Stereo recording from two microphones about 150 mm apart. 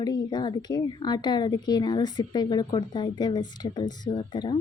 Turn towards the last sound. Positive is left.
turn(degrees=30)  # may be behind; listen again after turning